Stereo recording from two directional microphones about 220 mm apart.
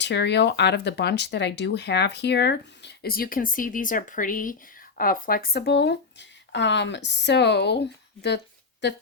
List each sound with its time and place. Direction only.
0.0 s speech: 50° left (ahead or behind)